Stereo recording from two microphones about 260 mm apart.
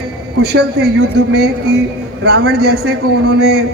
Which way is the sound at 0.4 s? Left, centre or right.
Right.